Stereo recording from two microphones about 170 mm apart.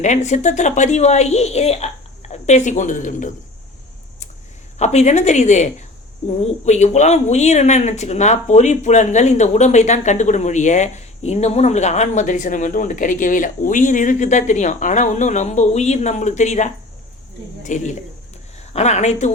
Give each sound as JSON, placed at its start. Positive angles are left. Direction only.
{"t": 0.0, "sound": "speech", "side_deg": 45}
{"t": 4.8, "sound": "speech", "side_deg": 40}